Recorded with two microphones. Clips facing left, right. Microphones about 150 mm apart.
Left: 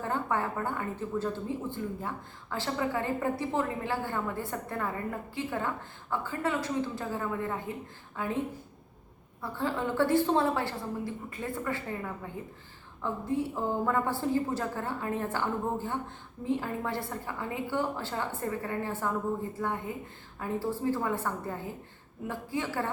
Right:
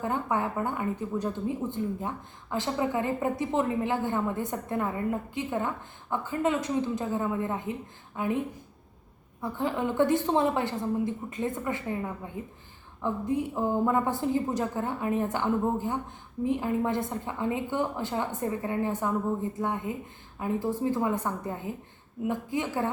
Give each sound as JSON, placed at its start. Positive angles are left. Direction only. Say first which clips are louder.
{"t": 0.0, "sound": "speech", "louder": "right 2 dB", "side_deg": -15}
{"t": 9.4, "sound": "a woman's voice", "louder": "right 3 dB", "side_deg": -15}